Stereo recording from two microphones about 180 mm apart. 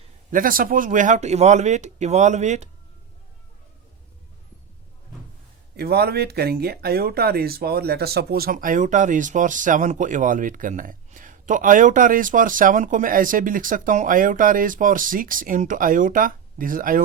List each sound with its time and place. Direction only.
0.3 s speech: 50° right (ahead or behind)
5.7 s speech: 60° right (ahead or behind)